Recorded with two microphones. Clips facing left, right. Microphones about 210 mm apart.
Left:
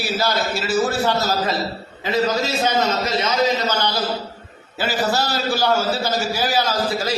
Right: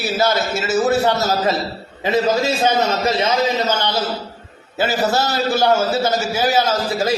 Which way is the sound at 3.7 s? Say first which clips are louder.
Right 1 dB; 25° right (ahead or behind).